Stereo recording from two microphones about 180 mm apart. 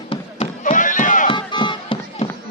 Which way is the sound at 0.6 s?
45° left (ahead or behind).